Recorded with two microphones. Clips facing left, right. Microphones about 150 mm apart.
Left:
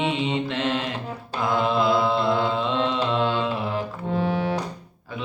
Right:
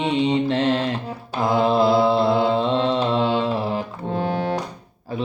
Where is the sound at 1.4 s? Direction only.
35° right (ahead or behind).